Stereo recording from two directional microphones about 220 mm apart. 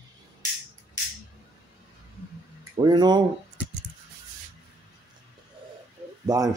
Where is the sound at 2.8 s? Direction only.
20° right (ahead or behind).